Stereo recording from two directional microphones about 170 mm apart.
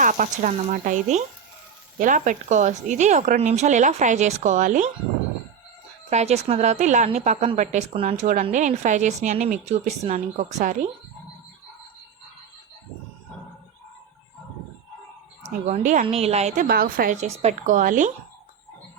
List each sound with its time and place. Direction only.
0.0 s a woman's voice: 50° right (ahead or behind)
6.1 s a woman's voice: 40° right (ahead or behind)
15.4 s a woman's voice: 40° right (ahead or behind)
16.6 s a woman's voice: 60° right (ahead or behind)